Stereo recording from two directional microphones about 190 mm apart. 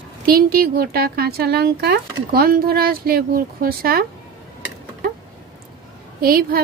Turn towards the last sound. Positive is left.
turn(degrees=-50)  # may be behind; listen again after turning